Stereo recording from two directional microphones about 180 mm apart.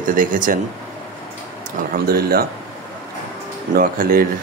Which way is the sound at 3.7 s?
50° right (ahead or behind).